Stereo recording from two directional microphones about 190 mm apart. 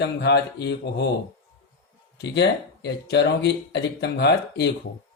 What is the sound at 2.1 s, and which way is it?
Speech, 65° left (ahead or behind).